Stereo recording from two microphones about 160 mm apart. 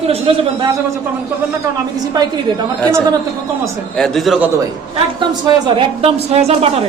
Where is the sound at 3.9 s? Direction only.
5° left (ahead or behind).